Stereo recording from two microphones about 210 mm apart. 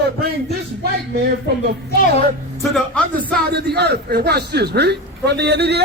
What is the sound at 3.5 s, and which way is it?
A man's voice, 50° right (ahead or behind).